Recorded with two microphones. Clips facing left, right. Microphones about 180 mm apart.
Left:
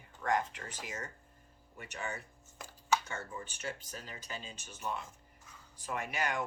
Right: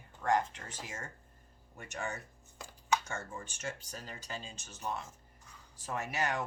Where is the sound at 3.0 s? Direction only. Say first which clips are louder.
Right 1 dB; 45° right (ahead or behind).